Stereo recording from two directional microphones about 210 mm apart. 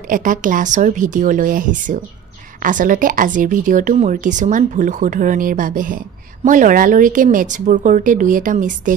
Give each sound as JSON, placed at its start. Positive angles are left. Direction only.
{"t": 0.1, "sound": "speech", "side_deg": -40}